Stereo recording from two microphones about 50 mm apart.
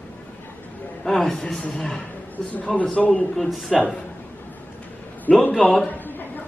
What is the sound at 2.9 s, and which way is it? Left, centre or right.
Speech, left.